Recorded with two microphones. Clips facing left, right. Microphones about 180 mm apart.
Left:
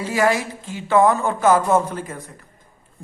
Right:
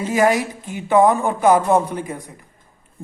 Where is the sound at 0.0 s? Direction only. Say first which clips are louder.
Right 2 dB; 20° right (ahead or behind).